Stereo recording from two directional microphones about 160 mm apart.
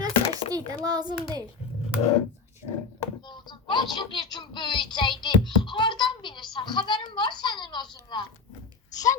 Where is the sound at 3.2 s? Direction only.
30° left (ahead or behind).